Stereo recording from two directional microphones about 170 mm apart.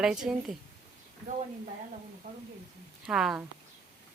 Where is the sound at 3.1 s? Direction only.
5° right (ahead or behind).